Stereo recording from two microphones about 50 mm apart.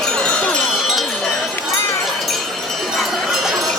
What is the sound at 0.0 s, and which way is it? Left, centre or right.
Wind chime, centre.